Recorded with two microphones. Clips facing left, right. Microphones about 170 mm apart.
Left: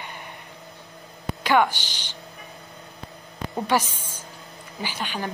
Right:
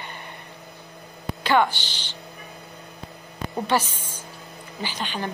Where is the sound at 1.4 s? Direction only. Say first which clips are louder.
Even; 10° left (ahead or behind).